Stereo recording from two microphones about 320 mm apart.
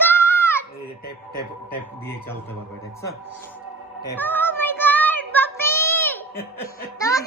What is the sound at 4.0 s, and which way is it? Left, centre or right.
Child singing, centre.